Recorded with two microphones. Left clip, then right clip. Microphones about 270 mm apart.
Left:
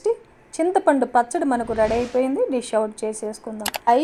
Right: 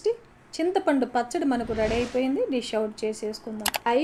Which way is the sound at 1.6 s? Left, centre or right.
Centre.